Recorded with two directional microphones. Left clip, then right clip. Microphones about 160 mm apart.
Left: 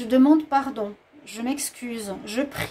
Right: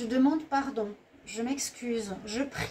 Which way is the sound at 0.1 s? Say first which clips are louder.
Left 9 dB; 60° left (ahead or behind).